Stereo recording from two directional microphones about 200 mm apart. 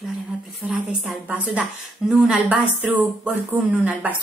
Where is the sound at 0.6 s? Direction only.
5° right (ahead or behind).